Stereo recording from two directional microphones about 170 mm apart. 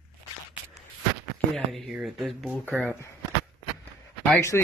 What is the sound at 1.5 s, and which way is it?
Speech, centre (ahead or behind).